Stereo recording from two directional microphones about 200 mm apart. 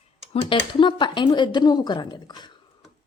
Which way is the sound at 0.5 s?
25° left (ahead or behind).